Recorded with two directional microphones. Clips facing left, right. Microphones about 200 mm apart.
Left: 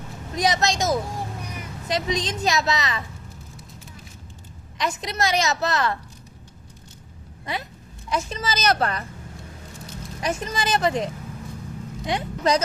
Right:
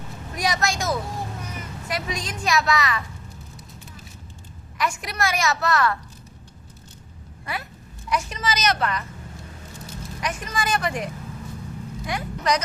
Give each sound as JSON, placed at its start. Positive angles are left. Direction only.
{"t": 0.3, "sound": "a woman's voice", "side_deg": 20}
{"t": 4.8, "sound": "a woman's voice", "side_deg": 20}
{"t": 7.4, "sound": "a woman's voice", "side_deg": 20}
{"t": 10.2, "sound": "a woman's voice", "side_deg": 30}